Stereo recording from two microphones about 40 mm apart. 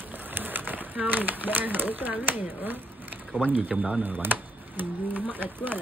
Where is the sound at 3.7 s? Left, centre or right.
Right.